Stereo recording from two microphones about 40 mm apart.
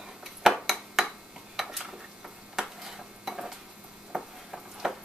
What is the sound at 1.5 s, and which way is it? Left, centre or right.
Stir, centre.